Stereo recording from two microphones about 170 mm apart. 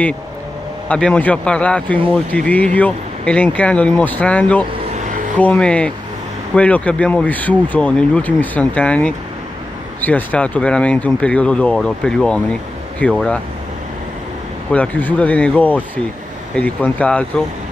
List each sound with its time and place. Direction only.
0.8 s speech: 5° left (ahead or behind)
4.9 s a sound: 45° right (ahead or behind)
5.4 s speech: 5° left (ahead or behind)
14.7 s speech: 10° left (ahead or behind)